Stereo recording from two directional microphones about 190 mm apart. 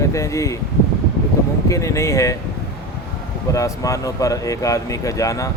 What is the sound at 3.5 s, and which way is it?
Speech, 15° left (ahead or behind).